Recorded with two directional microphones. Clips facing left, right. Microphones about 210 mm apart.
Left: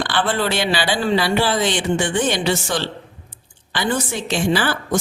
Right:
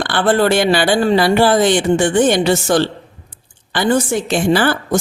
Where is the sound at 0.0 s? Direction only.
50° right (ahead or behind).